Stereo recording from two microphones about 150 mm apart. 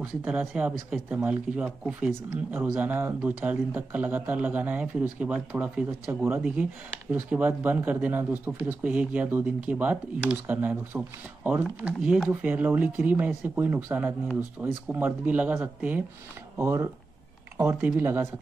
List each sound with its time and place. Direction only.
0.6 s speech: 5° right (ahead or behind)